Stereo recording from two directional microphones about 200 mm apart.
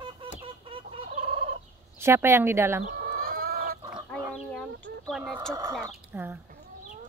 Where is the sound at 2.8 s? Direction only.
45° right (ahead or behind).